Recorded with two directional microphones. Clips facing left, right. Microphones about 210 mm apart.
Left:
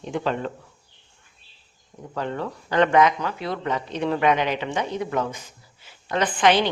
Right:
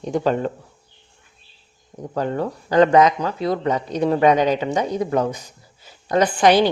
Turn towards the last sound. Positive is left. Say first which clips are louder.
# right 5 dB
turn(degrees=-40)  # may be behind; listen again after turning